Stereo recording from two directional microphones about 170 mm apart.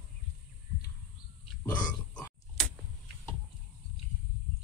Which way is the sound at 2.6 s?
Centre (ahead or behind).